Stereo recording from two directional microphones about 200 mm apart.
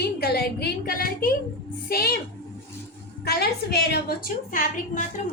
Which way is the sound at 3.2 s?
55° left (ahead or behind).